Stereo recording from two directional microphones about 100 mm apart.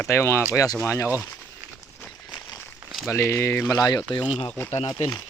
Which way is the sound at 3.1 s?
30° left (ahead or behind).